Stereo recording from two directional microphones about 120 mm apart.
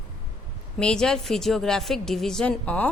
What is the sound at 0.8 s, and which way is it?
A woman's voice, 5° left (ahead or behind).